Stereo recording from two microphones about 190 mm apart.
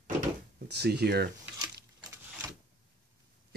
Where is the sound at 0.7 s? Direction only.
60° right (ahead or behind).